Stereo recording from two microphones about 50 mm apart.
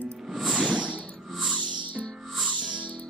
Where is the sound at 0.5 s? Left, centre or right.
Right.